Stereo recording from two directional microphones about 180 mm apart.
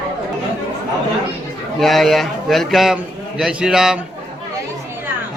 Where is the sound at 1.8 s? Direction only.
Centre (ahead or behind).